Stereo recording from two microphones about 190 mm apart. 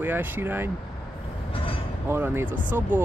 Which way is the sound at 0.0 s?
10° right (ahead or behind).